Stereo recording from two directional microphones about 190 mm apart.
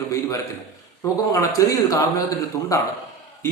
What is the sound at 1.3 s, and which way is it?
A man's voice, 15° left (ahead or behind).